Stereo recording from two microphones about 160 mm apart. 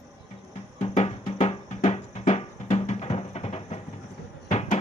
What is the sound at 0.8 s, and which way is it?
Music, 45° left (ahead or behind).